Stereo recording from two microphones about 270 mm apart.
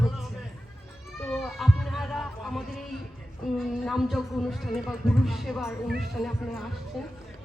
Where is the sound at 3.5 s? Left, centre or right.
Centre.